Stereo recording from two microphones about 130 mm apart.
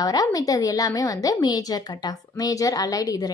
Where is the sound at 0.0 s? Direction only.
30° left (ahead or behind).